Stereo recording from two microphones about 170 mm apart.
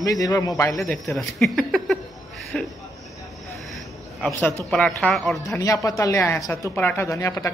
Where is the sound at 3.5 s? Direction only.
Centre (ahead or behind).